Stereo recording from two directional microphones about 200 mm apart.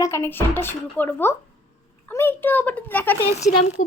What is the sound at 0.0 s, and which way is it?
Speech, 15° left (ahead or behind).